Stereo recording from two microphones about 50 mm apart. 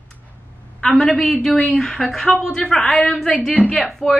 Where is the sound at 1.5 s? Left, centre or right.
Left.